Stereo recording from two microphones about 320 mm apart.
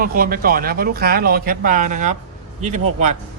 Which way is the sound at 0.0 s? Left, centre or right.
Right.